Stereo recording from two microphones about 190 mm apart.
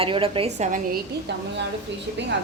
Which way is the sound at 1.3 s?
65° right (ahead or behind).